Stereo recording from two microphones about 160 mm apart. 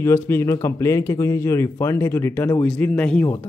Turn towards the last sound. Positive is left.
turn(degrees=10)  # may be behind; listen again after turning